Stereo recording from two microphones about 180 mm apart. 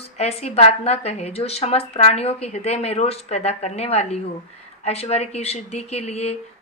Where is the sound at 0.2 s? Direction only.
35° left (ahead or behind).